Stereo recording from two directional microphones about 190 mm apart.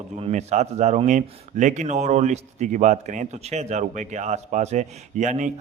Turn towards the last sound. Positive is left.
turn(degrees=-40)  # may be behind; listen again after turning